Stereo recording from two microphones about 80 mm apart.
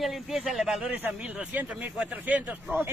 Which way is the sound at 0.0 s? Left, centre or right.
Centre.